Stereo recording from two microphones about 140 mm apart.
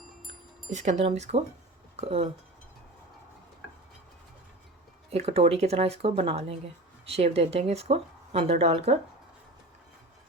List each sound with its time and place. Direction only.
0.7 s speech: 55° right (ahead or behind)
5.1 s speech: 45° right (ahead or behind)